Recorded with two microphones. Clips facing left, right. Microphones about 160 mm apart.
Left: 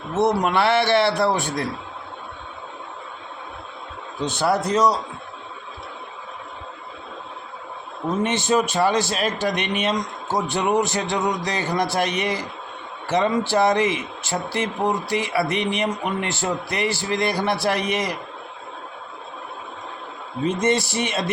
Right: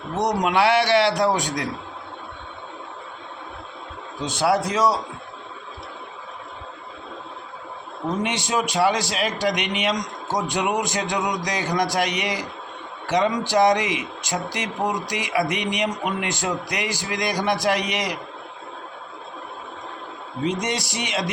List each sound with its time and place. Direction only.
0.2 s speech: 15° right (ahead or behind)
4.4 s speech: 10° right (ahead or behind)
8.2 s speech: 15° right (ahead or behind)
20.4 s speech: 15° right (ahead or behind)